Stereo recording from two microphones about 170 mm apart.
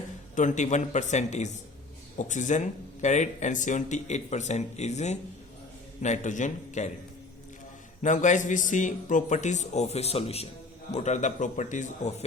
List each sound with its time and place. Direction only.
0.3 s speech: 45° left (ahead or behind)
8.0 s speech: 45° left (ahead or behind)